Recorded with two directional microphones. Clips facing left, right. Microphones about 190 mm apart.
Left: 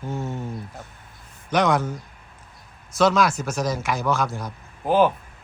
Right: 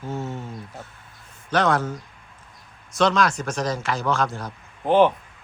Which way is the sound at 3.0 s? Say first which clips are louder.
Left 1 dB; 5° left (ahead or behind).